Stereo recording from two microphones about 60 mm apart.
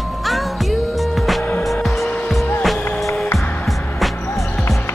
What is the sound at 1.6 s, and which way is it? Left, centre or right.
Music, centre.